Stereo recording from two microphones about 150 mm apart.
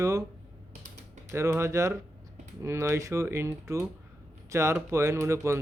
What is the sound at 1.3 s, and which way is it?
Speech, 20° right (ahead or behind).